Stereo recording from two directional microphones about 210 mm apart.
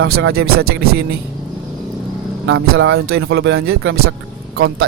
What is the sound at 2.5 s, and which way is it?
Speech, 60° right (ahead or behind).